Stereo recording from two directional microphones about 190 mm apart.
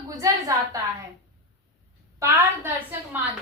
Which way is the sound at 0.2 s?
15° right (ahead or behind).